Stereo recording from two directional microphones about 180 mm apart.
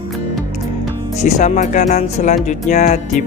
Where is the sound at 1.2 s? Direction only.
40° left (ahead or behind).